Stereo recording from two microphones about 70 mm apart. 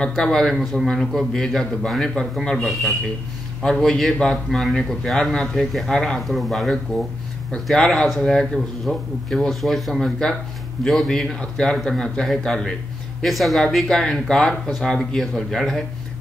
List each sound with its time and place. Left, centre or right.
0.2 s a man's voice: centre